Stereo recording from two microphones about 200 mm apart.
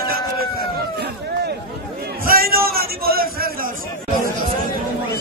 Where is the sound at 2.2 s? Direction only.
45° right (ahead or behind).